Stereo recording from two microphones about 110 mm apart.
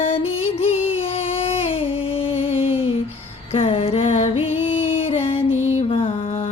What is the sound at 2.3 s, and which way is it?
Music, 60° left (ahead or behind).